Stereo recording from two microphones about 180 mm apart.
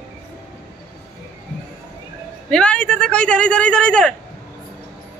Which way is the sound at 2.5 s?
5° left (ahead or behind).